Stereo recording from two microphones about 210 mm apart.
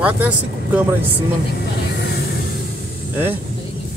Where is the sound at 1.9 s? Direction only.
50° left (ahead or behind).